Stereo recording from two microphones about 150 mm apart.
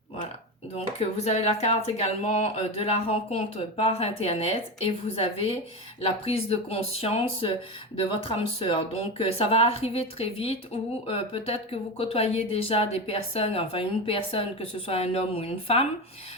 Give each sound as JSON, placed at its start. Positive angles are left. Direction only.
{"t": 0.9, "sound": "speech", "side_deg": 45}